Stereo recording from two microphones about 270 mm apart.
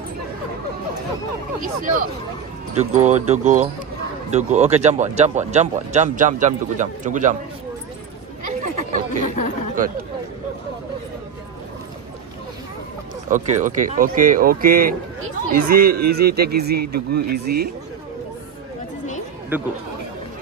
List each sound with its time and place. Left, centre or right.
1.6 s speech: right
9.8 s speech: right
13.3 s speech: right
19.5 s speech: centre